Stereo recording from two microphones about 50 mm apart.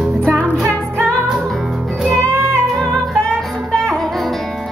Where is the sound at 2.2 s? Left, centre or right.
Right.